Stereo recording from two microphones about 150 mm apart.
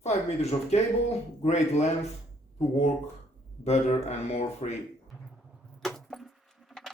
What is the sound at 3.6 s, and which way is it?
Speech, 45° left (ahead or behind).